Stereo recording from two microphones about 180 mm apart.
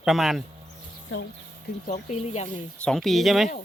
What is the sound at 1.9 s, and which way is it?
Speech, 35° left (ahead or behind).